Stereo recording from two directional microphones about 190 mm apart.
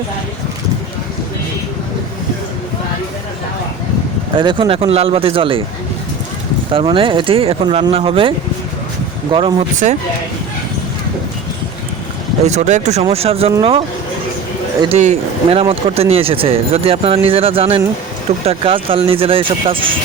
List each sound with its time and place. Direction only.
4.4 s speech: 25° right (ahead or behind)
6.7 s speech: 30° right (ahead or behind)
9.3 s speech: 30° right (ahead or behind)
12.5 s speech: 35° right (ahead or behind)